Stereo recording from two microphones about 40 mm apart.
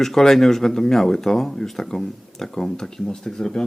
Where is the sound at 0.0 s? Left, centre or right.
Centre.